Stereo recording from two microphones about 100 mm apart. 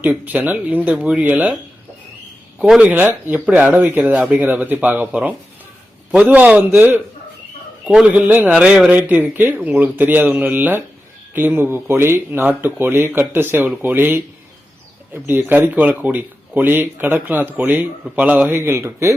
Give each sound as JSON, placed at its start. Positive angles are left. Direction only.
{"t": 0.0, "sound": "speech", "side_deg": -15}
{"t": 2.6, "sound": "speech", "side_deg": -10}